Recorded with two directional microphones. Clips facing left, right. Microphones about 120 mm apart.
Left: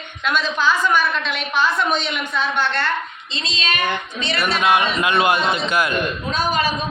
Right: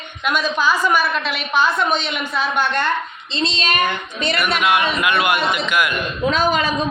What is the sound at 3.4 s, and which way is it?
Speech, 35° right (ahead or behind).